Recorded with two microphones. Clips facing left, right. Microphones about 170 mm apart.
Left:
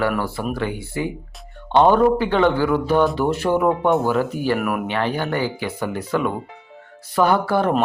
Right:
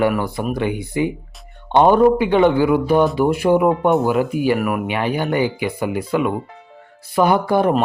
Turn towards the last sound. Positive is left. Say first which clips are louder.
# right 2 dB
turn(degrees=-15)  # may be behind; listen again after turning